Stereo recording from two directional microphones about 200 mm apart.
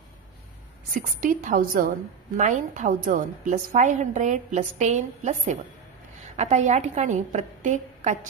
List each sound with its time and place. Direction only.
0.9 s a woman's voice: 40° right (ahead or behind)